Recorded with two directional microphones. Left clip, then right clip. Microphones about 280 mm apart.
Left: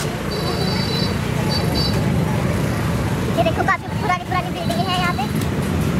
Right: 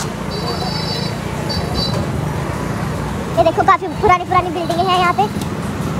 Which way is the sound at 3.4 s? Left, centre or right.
Right.